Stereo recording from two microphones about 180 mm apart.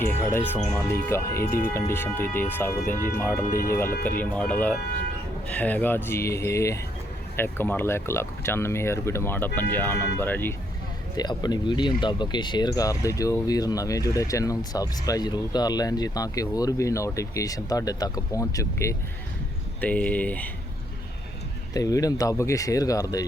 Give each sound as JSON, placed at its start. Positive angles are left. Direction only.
{"t": 0.0, "sound": "speech", "side_deg": 10}
{"t": 11.2, "sound": "speech", "side_deg": 25}
{"t": 21.7, "sound": "speech", "side_deg": 20}